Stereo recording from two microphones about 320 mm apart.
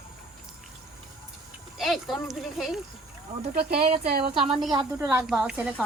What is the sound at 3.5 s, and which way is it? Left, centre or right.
Speech, right.